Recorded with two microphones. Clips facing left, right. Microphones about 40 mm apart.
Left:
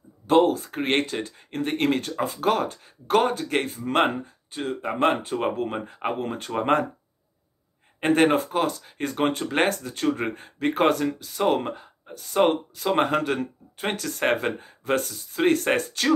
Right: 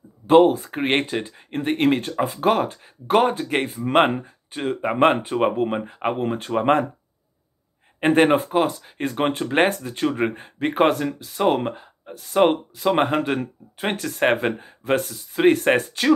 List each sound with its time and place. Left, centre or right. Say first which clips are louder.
0.3 s speech: right 5 dB; right; by 6.9 s centre
8.0 s speech: right 3 dB; centre
11.7 s speech: right 1 dB; right